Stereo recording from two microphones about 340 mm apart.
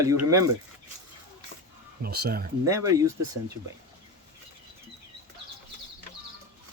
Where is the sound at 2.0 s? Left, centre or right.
Right.